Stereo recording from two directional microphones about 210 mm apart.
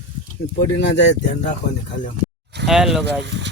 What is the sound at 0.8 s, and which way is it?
Speech, 55° left (ahead or behind).